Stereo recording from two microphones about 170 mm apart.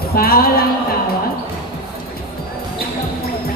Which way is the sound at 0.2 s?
60° left (ahead or behind).